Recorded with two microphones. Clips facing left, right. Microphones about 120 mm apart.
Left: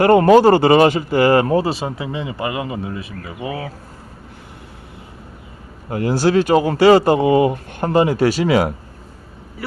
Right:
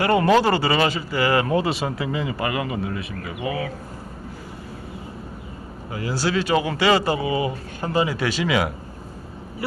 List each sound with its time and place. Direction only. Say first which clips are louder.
0.0 s speech: left 7 dB; 45° left (ahead or behind)
5.9 s speech: left 8 dB; 55° left (ahead or behind)